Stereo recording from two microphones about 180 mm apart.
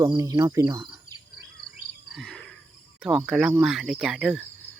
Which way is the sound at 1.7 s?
Centre (ahead or behind).